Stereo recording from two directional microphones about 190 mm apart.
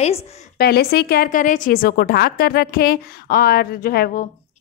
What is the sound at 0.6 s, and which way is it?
A woman's voice, 55° left (ahead or behind).